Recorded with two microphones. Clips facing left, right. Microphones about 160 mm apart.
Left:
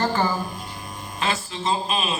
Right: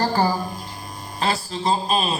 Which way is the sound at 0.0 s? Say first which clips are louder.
Right 2 dB; 35° right (ahead or behind).